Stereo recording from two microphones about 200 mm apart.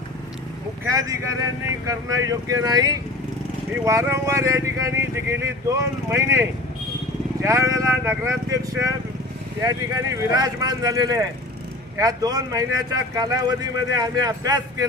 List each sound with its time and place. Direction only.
0.9 s speech: 15° right (ahead or behind)